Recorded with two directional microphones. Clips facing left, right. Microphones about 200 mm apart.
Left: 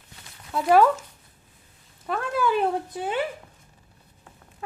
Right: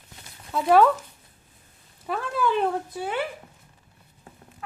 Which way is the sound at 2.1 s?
Centre (ahead or behind).